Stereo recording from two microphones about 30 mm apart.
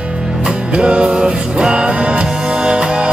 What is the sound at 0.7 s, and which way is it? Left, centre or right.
Music, right.